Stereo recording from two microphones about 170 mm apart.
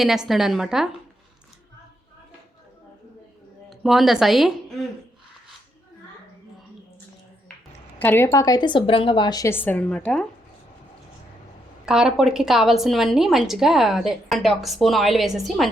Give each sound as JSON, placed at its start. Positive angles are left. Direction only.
{"t": 0.0, "sound": "a woman's voice", "side_deg": 0}
{"t": 3.7, "sound": "speech", "side_deg": 0}
{"t": 7.9, "sound": "a woman's voice", "side_deg": 15}
{"t": 11.9, "sound": "a woman's voice", "side_deg": -5}